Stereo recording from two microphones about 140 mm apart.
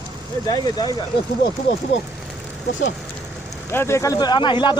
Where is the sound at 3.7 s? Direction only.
20° left (ahead or behind); by 4.7 s 35° left (ahead or behind).